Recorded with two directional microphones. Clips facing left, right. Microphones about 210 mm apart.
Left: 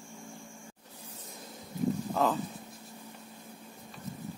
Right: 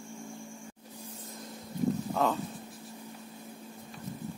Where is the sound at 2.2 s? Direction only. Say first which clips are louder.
Left 1 dB; centre (ahead or behind).